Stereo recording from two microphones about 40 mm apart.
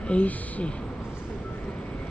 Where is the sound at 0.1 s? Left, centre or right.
Left.